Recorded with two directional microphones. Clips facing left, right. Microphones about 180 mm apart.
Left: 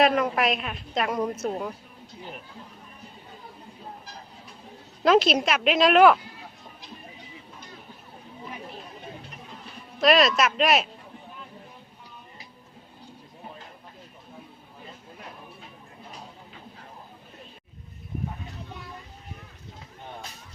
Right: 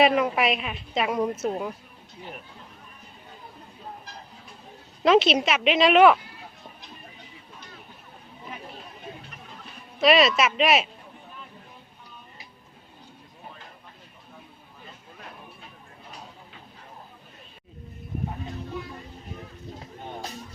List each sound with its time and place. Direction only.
0.0 s a woman's voice: 5° right (ahead or behind)
5.0 s a woman's voice: centre (ahead or behind)
10.0 s a woman's voice: 5° right (ahead or behind)